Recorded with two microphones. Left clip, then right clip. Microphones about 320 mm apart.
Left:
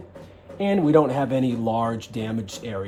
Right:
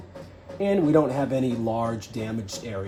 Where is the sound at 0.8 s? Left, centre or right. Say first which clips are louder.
Left 5 dB; left.